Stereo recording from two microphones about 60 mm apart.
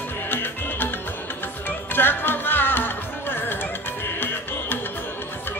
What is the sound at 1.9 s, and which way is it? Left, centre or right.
Music, left.